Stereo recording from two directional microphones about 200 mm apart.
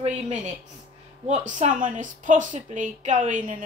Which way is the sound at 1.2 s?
35° right (ahead or behind).